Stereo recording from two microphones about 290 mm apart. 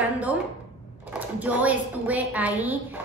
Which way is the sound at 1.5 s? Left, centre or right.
Centre.